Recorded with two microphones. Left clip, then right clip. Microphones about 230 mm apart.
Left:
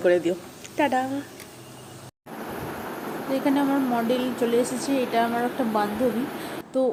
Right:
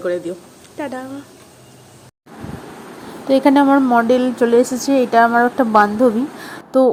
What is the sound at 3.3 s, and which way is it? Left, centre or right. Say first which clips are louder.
A woman's voice: right 12 dB; right.